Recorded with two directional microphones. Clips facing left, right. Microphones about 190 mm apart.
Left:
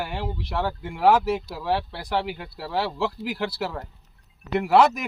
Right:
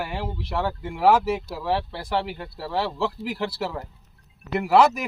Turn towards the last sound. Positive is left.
turn(degrees=0)  # may be behind; listen again after turning